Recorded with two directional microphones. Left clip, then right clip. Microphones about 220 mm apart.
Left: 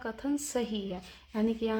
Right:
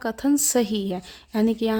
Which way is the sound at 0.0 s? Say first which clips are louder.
Right 11 dB; 45° right (ahead or behind).